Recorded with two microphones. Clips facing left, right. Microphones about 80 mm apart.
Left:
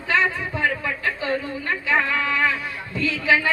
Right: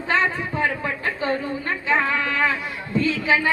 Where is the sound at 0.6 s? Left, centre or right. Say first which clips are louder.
Even; right.